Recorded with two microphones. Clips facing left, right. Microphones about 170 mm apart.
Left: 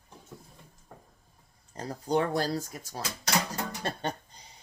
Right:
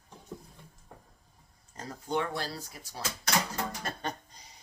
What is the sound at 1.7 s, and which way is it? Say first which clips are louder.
Speech: left 5 dB; 35° left (ahead or behind).